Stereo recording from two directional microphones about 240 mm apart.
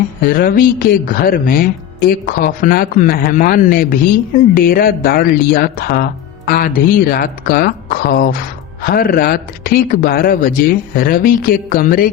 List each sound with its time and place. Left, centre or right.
0.2 s speech: left